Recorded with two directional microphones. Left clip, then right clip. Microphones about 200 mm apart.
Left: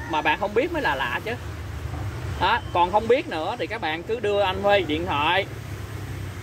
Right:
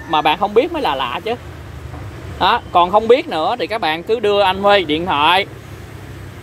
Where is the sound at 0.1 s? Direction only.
40° right (ahead or behind).